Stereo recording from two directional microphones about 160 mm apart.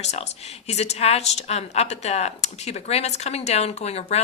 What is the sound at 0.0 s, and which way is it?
A woman's voice, 40° left (ahead or behind).